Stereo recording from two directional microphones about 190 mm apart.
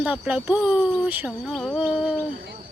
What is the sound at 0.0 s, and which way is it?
Speech, 5° right (ahead or behind).